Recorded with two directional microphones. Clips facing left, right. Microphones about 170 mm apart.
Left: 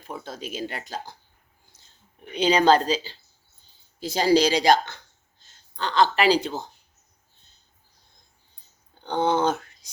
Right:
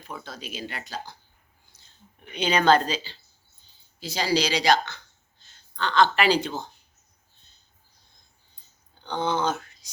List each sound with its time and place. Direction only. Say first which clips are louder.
0.3 s speech: left 7 dB; 45° left (ahead or behind)
1.7 s a sound: left 1 dB; 45° left (ahead or behind)
2.3 s speech: left 2 dB; 35° left (ahead or behind)
5.4 s speech: even; 35° left (ahead or behind)
9.0 s speech: left 4 dB; 55° left (ahead or behind)